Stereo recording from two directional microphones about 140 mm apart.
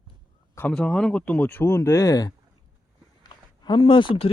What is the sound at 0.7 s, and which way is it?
Speech, 5° left (ahead or behind).